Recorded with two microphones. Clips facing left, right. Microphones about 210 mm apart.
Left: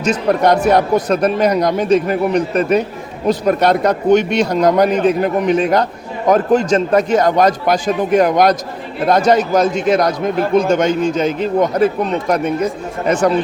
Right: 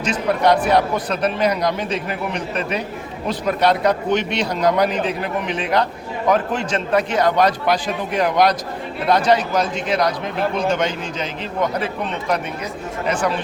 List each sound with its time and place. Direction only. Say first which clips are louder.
0.0 s speech: left 4 dB; 45° left (ahead or behind)